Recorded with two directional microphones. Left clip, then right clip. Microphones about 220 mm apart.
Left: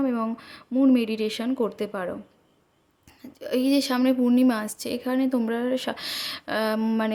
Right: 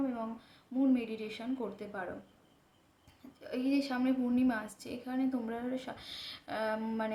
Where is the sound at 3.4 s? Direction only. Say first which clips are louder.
Left 11 dB; 50° left (ahead or behind).